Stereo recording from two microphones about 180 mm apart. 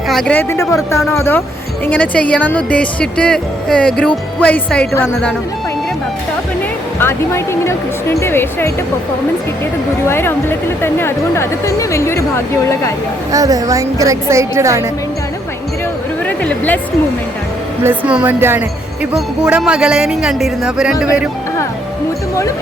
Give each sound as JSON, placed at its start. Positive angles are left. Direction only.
{"t": 0.1, "sound": "a woman's voice", "side_deg": 5}
{"t": 7.0, "sound": "a woman's voice", "side_deg": 15}
{"t": 10.1, "sound": "a woman's voice", "side_deg": 15}
{"t": 13.3, "sound": "a woman's voice", "side_deg": -20}
{"t": 16.2, "sound": "speech", "side_deg": 5}
{"t": 17.8, "sound": "a woman's voice", "side_deg": -10}